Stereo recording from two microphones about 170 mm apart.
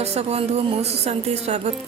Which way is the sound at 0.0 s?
40° right (ahead or behind).